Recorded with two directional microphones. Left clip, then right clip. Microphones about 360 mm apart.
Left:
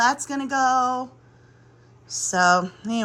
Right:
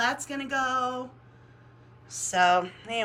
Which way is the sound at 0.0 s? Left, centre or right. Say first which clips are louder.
Left 7 dB; centre.